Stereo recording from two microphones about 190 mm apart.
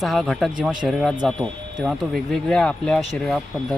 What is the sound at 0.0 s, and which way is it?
Speech, centre (ahead or behind).